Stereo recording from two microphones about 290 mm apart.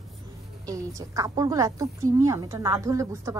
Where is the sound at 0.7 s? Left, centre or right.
Centre.